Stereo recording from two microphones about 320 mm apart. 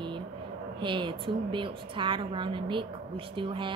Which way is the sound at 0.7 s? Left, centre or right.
Centre.